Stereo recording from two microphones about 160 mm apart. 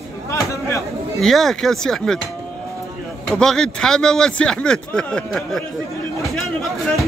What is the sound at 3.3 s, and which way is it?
Speech, 5° left (ahead or behind).